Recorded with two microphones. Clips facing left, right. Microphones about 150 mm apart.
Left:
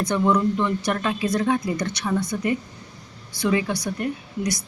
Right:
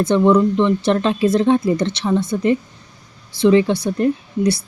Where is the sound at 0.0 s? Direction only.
25° right (ahead or behind).